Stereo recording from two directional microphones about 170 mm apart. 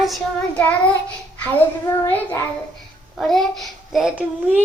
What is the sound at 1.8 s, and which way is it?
Child singing, 10° left (ahead or behind).